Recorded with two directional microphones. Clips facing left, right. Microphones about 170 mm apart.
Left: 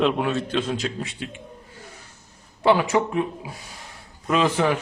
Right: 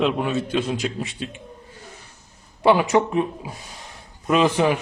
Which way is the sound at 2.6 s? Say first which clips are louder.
Right 2 dB; 20° right (ahead or behind).